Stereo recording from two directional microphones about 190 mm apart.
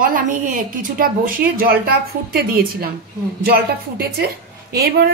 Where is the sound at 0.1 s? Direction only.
45° right (ahead or behind).